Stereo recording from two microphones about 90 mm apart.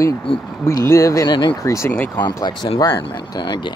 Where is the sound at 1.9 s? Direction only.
20° left (ahead or behind).